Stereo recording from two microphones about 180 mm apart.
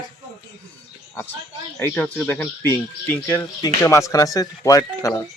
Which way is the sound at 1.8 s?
10° left (ahead or behind).